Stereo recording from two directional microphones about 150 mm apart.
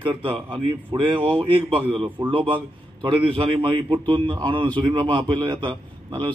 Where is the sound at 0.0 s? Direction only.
35° right (ahead or behind).